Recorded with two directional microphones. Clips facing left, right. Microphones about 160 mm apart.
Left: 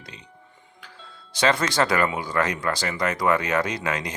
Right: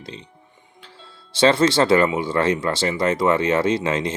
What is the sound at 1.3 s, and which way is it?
Speech, 25° right (ahead or behind).